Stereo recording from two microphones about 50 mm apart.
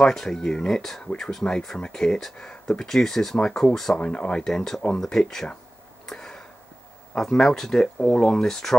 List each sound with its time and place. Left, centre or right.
0.0 s speech: centre
4.0 s speech: left
4.5 s speech: centre
6.0 s a sound: centre
7.2 s speech: centre